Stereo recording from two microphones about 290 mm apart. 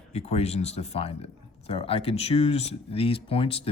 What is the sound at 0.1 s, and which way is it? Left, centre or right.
Speech, left.